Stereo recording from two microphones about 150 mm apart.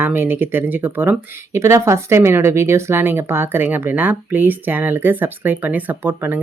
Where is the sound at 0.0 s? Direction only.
15° right (ahead or behind).